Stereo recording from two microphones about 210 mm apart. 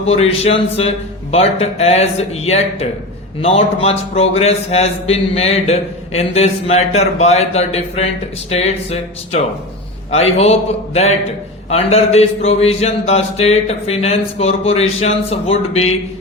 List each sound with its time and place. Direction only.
0.0 s mantra: 30° left (ahead or behind)
10.1 s a man's voice: 30° left (ahead or behind)
11.7 s mantra: 30° left (ahead or behind)